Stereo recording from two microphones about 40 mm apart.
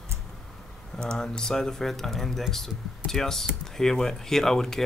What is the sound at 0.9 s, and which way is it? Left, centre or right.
Speech, centre.